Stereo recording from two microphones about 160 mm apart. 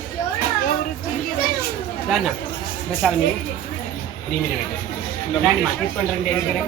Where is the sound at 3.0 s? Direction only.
5° right (ahead or behind).